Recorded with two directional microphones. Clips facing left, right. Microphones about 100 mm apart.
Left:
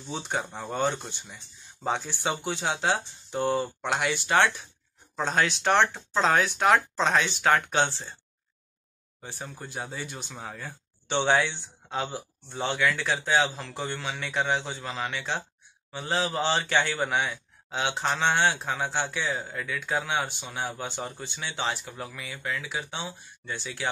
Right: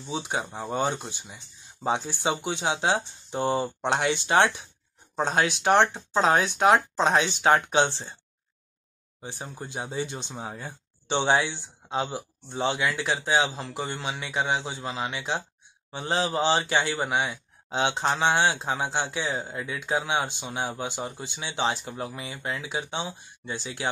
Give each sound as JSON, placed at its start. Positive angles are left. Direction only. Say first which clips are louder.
{"t": 0.1, "sound": "speech", "louder": "right 1 dB", "side_deg": -15}
{"t": 9.2, "sound": "speech", "louder": "right 2 dB", "side_deg": -20}